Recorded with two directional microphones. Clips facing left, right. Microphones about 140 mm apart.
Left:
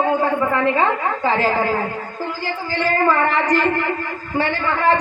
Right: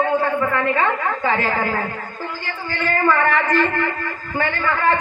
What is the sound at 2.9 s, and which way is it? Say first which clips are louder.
A man's voice: even; 35° left (ahead or behind).